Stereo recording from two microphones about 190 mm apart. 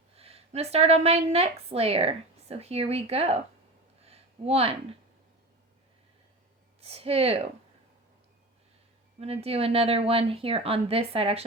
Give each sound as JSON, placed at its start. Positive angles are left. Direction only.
{"t": 0.2, "sound": "a woman's voice", "side_deg": -30}
{"t": 4.0, "sound": "a sound", "side_deg": -30}
{"t": 6.8, "sound": "speech", "side_deg": -30}
{"t": 9.2, "sound": "a woman's voice", "side_deg": -30}